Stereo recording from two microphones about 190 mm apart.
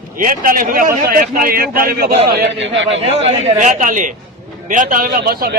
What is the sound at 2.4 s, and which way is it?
Speech, 70° right (ahead or behind).